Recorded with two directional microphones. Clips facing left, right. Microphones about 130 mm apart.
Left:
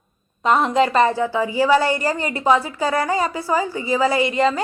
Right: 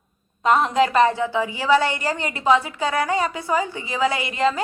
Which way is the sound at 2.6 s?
35° left (ahead or behind).